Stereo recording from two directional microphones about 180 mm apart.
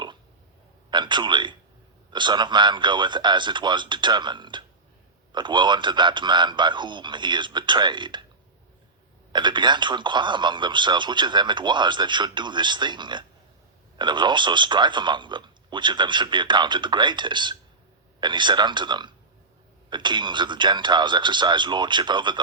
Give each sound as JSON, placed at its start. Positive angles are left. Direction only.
{"t": 0.9, "sound": "a man's voice", "side_deg": -25}
{"t": 9.3, "sound": "speech", "side_deg": -25}